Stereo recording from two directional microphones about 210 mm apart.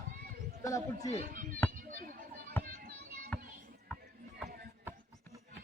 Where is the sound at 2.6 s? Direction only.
45° right (ahead or behind).